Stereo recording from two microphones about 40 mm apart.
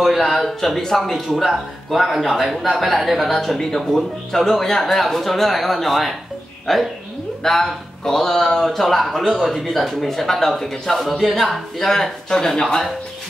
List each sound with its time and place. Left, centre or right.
0.0 s speech: centre
3.3 s speech: centre